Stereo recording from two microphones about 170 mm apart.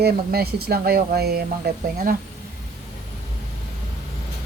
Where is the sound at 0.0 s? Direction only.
65° right (ahead or behind).